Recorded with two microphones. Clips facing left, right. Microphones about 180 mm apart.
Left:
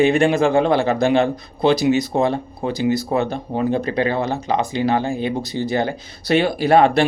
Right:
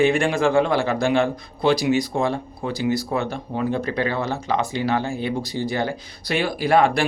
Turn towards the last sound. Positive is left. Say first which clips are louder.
# left 4 dB
turn(degrees=25)  # may be behind; listen again after turning